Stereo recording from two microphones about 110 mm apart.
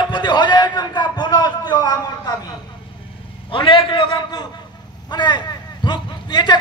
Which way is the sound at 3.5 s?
50° left (ahead or behind).